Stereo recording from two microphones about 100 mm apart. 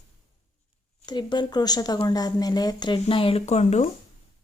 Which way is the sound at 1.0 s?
45° left (ahead or behind).